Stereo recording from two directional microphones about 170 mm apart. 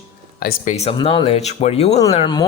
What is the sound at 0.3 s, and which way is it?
Speech, 60° left (ahead or behind).